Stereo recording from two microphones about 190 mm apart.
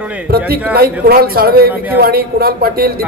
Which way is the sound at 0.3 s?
55° right (ahead or behind).